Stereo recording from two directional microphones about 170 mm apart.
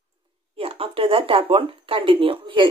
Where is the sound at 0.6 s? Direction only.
35° right (ahead or behind).